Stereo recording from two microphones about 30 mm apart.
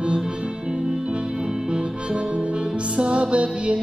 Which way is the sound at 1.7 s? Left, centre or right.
Right.